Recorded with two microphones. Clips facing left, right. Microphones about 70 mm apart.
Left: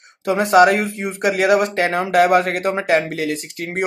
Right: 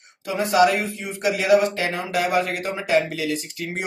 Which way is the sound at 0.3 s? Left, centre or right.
Left.